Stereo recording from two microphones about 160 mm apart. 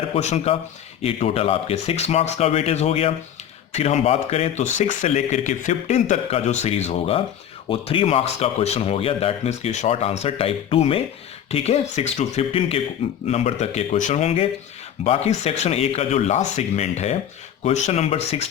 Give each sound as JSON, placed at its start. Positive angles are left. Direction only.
{"t": 0.1, "sound": "speech", "side_deg": 40}